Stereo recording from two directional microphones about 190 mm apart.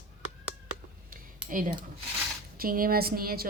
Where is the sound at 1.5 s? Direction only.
45° right (ahead or behind).